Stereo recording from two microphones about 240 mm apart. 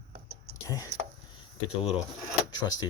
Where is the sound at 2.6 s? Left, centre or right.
Centre.